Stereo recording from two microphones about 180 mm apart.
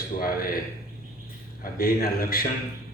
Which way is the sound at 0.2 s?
55° left (ahead or behind).